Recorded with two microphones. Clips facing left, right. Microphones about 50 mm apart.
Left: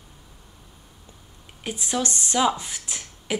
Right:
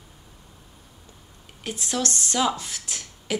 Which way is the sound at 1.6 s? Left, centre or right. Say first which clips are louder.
Left 1 dB; centre.